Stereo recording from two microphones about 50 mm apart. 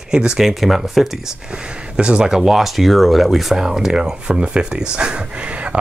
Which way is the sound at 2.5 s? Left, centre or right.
Centre.